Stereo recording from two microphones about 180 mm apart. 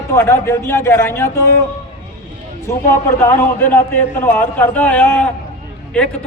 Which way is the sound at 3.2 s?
10° left (ahead or behind).